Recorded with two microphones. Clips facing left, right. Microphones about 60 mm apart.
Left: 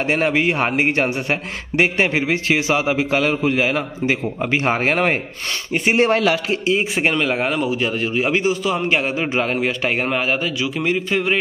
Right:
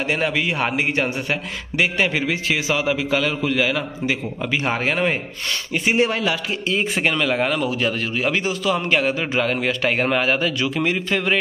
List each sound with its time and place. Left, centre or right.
0.1 s a man's voice: left
6.7 s a man's voice: left; by 11.3 s centre